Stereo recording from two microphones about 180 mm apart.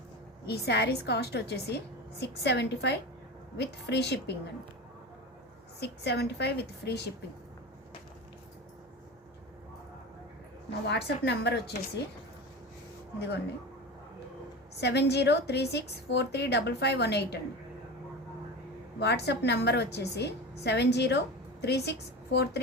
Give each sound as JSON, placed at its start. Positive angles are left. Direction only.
{"t": 0.4, "sound": "a woman's voice", "side_deg": 65}
{"t": 5.8, "sound": "a woman's voice", "side_deg": 70}
{"t": 10.8, "sound": "a woman's voice", "side_deg": 70}
{"t": 13.1, "sound": "a woman's voice", "side_deg": 70}
{"t": 14.8, "sound": "a woman's voice", "side_deg": 70}
{"t": 18.9, "sound": "a woman's voice", "side_deg": 70}